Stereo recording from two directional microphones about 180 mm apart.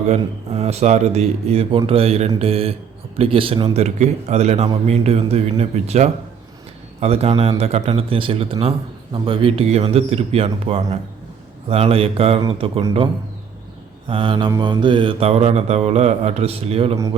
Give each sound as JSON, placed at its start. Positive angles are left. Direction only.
{"t": 0.2, "sound": "a man's voice", "side_deg": -35}
{"t": 14.1, "sound": "a man's voice", "side_deg": -30}